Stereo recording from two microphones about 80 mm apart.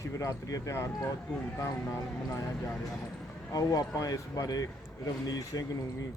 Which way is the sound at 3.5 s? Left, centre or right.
Left.